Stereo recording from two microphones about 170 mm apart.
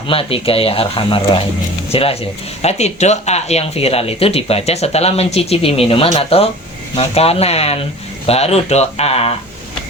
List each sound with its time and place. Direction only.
0.1 s speech: 35° left (ahead or behind)